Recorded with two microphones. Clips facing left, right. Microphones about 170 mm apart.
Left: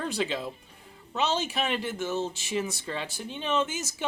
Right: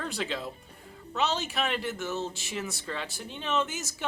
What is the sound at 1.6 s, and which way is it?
Speech, 25° left (ahead or behind).